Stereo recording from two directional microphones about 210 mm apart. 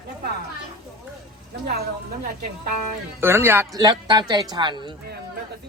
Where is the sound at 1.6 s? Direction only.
45° right (ahead or behind).